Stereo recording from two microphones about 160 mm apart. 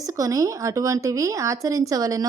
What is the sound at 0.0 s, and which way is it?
A woman's voice, 20° right (ahead or behind).